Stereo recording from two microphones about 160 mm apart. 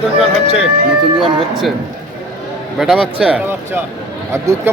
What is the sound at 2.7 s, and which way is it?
Speech, centre (ahead or behind).